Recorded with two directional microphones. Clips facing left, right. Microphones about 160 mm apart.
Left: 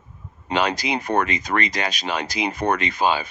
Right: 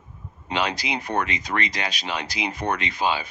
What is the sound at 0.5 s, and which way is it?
Speech, 45° left (ahead or behind).